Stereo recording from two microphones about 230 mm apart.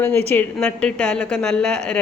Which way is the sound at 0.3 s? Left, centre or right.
Centre.